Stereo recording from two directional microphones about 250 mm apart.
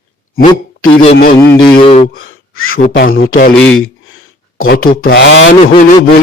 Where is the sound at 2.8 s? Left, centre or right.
Left.